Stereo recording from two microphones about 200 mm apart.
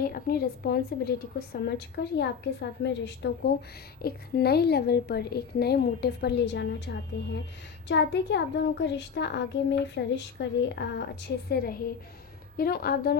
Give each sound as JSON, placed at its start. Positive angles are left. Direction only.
{"t": 0.0, "sound": "a woman's voice", "side_deg": 50}
{"t": 2.1, "sound": "a woman's voice", "side_deg": 60}
{"t": 11.4, "sound": "a woman's voice", "side_deg": 50}